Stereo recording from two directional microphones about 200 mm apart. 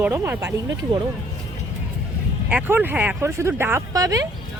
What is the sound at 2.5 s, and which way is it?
A woman's voice, 10° right (ahead or behind).